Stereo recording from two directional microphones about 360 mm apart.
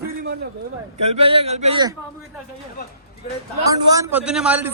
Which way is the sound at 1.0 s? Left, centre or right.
Centre.